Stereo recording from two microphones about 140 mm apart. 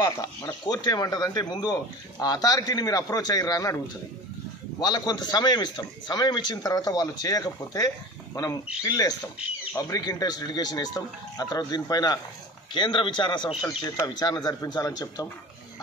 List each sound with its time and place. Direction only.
0.0 s speech: 25° left (ahead or behind)